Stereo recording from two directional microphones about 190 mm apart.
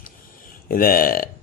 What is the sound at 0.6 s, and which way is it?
Speech, 50° left (ahead or behind).